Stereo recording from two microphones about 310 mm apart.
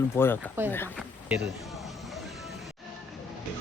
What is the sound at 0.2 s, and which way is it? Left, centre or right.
Speech, centre.